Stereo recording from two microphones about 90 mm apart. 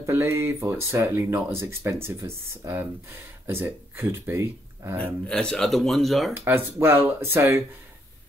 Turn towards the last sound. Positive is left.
turn(degrees=-30)  # may be behind; listen again after turning